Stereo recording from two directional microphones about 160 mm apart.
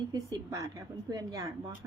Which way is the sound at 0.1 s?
20° right (ahead or behind).